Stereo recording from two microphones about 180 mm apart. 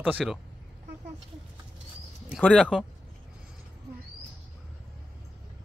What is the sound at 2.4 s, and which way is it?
Speech, 5° left (ahead or behind).